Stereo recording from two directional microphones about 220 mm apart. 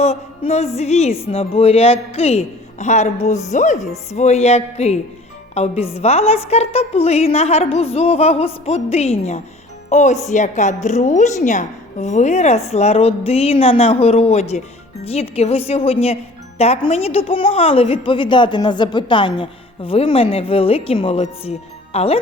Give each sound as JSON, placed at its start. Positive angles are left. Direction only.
{"t": 0.0, "sound": "a woman's voice", "side_deg": 30}